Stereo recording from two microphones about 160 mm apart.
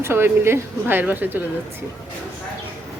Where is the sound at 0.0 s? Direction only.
15° right (ahead or behind).